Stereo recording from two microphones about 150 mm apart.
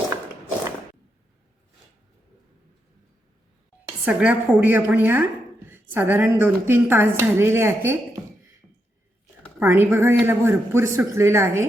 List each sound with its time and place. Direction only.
4.0 s speech: 10° right (ahead or behind)
9.6 s speech: 15° right (ahead or behind)